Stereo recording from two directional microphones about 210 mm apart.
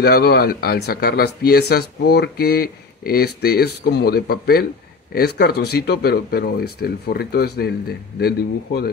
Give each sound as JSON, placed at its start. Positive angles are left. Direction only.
{"t": 0.0, "sound": "speech", "side_deg": 50}